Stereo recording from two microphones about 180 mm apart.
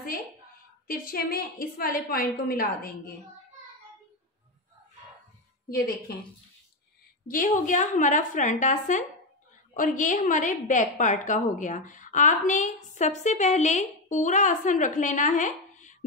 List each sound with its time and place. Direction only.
0.8 s a woman's voice: 55° left (ahead or behind)
5.7 s a woman's voice: 55° left (ahead or behind)
7.2 s a woman's voice: 50° left (ahead or behind)